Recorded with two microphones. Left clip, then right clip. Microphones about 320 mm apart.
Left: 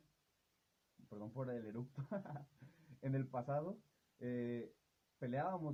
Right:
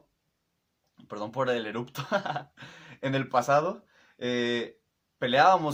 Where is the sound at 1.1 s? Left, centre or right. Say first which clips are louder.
Right 19 dB; left.